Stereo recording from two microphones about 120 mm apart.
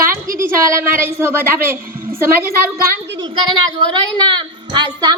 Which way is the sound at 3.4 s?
40° right (ahead or behind).